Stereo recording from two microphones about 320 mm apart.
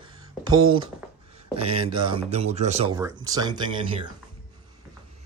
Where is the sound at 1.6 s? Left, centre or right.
Centre.